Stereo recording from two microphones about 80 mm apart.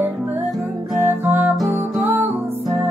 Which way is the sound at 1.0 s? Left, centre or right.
Right.